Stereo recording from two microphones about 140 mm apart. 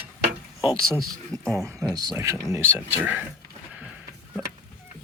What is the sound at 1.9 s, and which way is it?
Speech, 25° right (ahead or behind).